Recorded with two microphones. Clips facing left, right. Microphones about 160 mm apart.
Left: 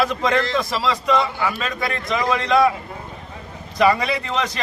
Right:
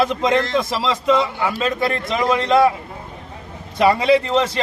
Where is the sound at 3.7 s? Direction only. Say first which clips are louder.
Right 4 dB; 25° right (ahead or behind).